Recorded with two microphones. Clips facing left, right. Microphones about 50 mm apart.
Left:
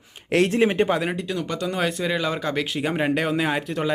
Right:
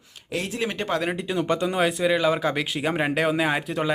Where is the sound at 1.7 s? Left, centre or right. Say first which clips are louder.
Right 1 dB; centre.